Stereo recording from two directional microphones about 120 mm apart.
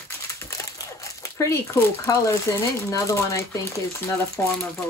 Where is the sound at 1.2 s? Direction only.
25° left (ahead or behind).